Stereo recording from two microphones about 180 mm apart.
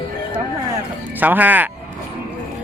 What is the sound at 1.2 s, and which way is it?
Speech, 10° right (ahead or behind).